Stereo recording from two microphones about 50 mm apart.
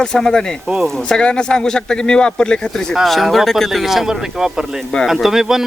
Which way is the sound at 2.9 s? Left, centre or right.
Centre.